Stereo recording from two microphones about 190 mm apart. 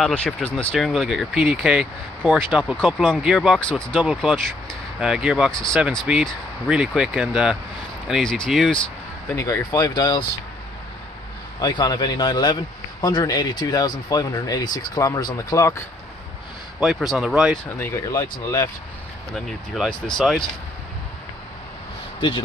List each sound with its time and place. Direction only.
0.0 s speech: 5° left (ahead or behind)
9.3 s speech: 15° left (ahead or behind)
11.6 s speech: 20° left (ahead or behind)
16.8 s speech: centre (ahead or behind)
17.7 s speech: 15° left (ahead or behind)
19.3 s speech: centre (ahead or behind)